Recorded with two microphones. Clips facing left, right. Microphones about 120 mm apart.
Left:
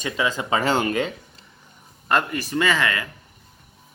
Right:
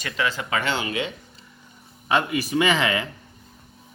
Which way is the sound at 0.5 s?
40° left (ahead or behind).